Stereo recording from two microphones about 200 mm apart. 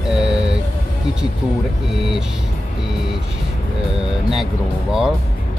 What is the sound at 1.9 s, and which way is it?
Speech, 5° right (ahead or behind).